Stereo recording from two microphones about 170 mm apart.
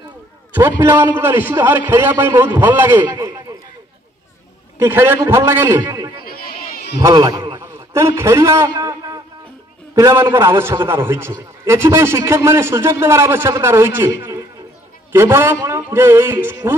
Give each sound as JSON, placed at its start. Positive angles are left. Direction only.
{"t": 0.5, "sound": "a man's voice", "side_deg": -15}
{"t": 4.7, "sound": "a man's voice", "side_deg": -15}
{"t": 6.2, "sound": "chatter", "side_deg": 60}
{"t": 7.0, "sound": "a sound", "side_deg": -20}
{"t": 9.9, "sound": "a man's voice", "side_deg": -15}